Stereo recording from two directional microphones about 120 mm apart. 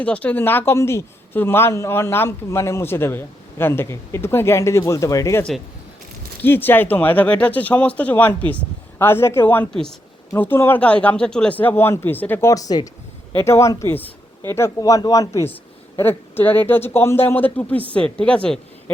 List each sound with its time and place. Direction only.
0.0 s speech: 10° left (ahead or behind); by 5.4 s 25° left (ahead or behind)
6.4 s speech: 15° left (ahead or behind)